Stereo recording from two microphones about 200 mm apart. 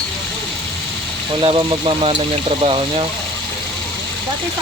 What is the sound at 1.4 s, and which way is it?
Speech, 25° right (ahead or behind).